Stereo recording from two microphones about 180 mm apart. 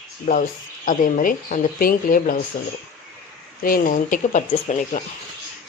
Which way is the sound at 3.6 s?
50° left (ahead or behind).